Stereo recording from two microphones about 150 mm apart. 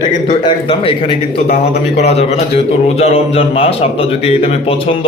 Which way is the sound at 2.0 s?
45° left (ahead or behind).